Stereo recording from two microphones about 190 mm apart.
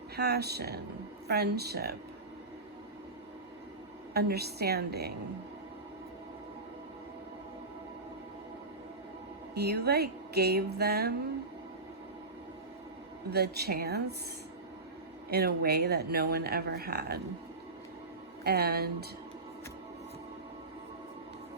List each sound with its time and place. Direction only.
0.2 s speech: 60° right (ahead or behind)
4.1 s speech: 60° right (ahead or behind)
9.6 s speech: 60° right (ahead or behind)
13.3 s speech: 60° right (ahead or behind)
15.3 s speech: 55° right (ahead or behind)
18.4 s speech: 55° right (ahead or behind)